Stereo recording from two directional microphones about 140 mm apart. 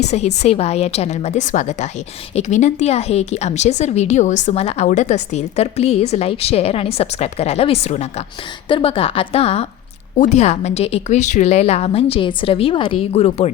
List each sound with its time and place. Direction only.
0.0 s a woman's voice: 55° left (ahead or behind)
10.2 s a woman's voice: 55° left (ahead or behind)